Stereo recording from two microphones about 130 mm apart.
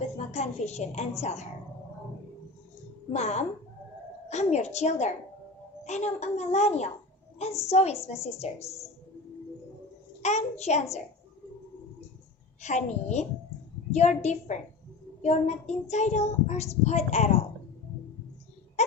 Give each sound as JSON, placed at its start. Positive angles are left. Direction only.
{"t": 0.3, "sound": "child singing", "side_deg": 60}
{"t": 3.1, "sound": "child singing", "side_deg": 60}
{"t": 8.0, "sound": "a woman's voice", "side_deg": 50}
{"t": 10.2, "sound": "child singing", "side_deg": 60}
{"t": 12.6, "sound": "child singing", "side_deg": 65}
{"t": 18.8, "sound": "a sound", "side_deg": 60}